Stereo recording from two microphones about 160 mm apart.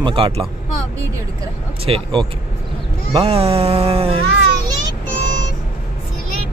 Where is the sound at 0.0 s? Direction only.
35° right (ahead or behind).